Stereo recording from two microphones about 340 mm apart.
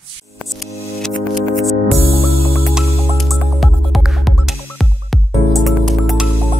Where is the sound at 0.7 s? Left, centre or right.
Centre.